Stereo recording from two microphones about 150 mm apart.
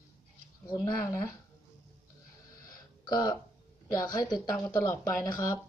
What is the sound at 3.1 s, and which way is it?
Speech, 25° left (ahead or behind).